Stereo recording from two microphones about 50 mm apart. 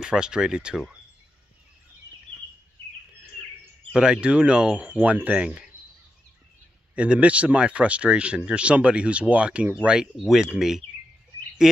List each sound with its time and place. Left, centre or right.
0.0 s speech: centre
3.9 s speech: centre
5.0 s speech: right
7.0 s speech: right
10.2 s speech: centre
11.6 s speech: centre